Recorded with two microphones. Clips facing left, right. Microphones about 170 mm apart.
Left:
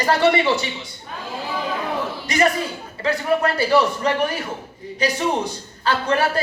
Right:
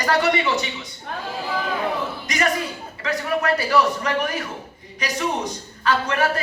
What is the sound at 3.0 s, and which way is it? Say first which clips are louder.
A man's voice: left 3 dB; 30° left (ahead or behind).